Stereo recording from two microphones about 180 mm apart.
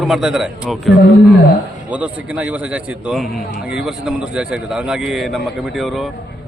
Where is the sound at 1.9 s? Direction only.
5° right (ahead or behind).